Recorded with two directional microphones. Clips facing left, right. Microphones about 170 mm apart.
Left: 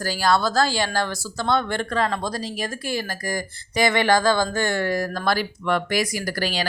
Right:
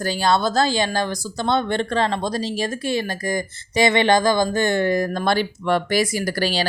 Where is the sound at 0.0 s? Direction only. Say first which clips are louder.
Right 2 dB; 20° right (ahead or behind).